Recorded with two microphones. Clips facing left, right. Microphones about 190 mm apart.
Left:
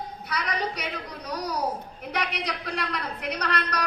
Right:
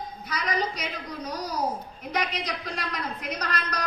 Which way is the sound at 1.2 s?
65° left (ahead or behind).